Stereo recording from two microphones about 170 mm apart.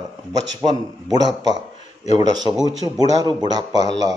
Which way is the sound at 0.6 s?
25° right (ahead or behind).